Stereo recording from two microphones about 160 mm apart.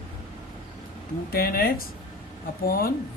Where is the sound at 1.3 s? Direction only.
70° left (ahead or behind).